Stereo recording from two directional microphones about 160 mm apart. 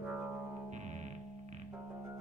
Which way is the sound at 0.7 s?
45° right (ahead or behind).